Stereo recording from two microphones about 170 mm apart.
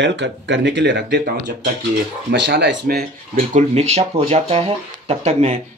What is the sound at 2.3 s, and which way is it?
Speech, 85° right.